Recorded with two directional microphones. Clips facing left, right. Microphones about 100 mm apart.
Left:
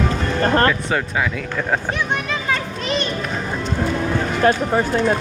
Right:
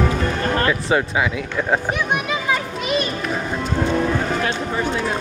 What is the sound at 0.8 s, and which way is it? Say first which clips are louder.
Speech: right 2 dB; 10° right (ahead or behind).